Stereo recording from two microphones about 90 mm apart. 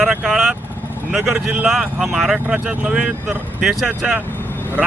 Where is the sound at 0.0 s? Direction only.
5° right (ahead or behind).